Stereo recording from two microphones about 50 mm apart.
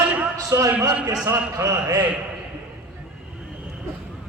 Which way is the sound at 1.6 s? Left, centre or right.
Right.